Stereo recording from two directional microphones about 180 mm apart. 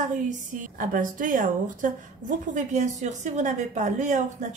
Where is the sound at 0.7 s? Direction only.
45° right (ahead or behind).